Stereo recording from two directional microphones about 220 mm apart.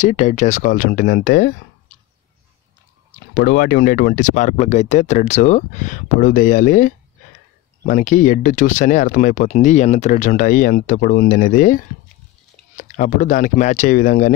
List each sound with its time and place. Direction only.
0.0 s speech: 35° left (ahead or behind)
3.3 s speech: 50° left (ahead or behind)